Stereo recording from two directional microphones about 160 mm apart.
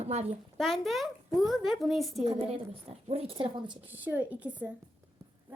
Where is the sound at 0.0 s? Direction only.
45° right (ahead or behind).